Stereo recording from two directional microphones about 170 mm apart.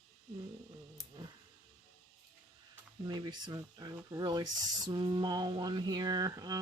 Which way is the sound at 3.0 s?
25° right (ahead or behind).